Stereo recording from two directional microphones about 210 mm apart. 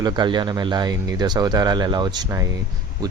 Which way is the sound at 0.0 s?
20° right (ahead or behind).